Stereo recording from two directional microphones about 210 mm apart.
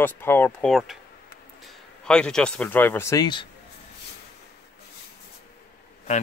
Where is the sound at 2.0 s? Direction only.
5° left (ahead or behind).